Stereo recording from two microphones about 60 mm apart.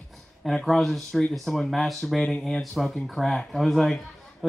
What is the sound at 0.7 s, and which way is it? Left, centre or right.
A man's voice, centre.